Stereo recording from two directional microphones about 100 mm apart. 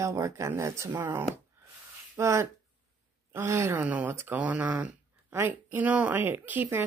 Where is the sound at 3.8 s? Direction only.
15° right (ahead or behind).